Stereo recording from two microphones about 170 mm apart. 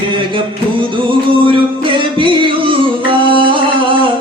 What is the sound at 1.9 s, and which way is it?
Music, 30° right (ahead or behind).